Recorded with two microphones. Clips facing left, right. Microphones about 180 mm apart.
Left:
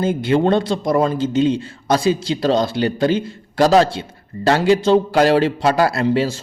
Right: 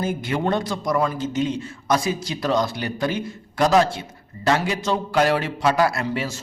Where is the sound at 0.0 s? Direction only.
30° left (ahead or behind).